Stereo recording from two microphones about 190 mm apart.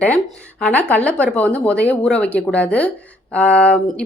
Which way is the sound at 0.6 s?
10° left (ahead or behind).